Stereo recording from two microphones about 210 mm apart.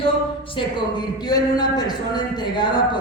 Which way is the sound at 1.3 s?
20° left (ahead or behind).